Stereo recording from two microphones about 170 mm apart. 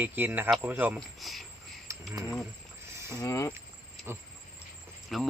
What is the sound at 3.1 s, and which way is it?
Speech, 20° left (ahead or behind).